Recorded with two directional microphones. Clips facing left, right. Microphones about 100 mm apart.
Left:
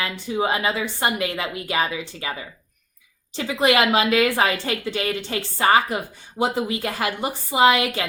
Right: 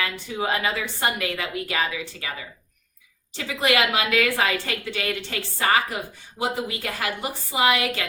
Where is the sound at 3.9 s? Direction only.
25° left (ahead or behind).